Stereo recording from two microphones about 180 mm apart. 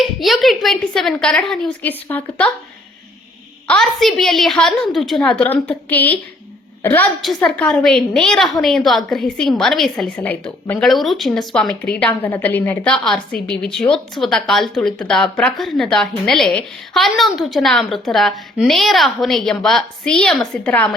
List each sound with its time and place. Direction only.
0.0 s a woman's voice: centre (ahead or behind)
3.7 s a woman's voice: centre (ahead or behind)